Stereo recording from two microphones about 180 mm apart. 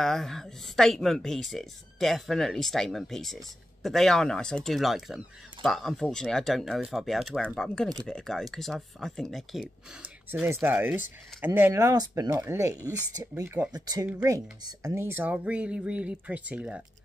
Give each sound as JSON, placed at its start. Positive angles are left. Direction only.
{"t": 0.0, "sound": "speech", "side_deg": 0}
{"t": 10.3, "sound": "speech", "side_deg": -10}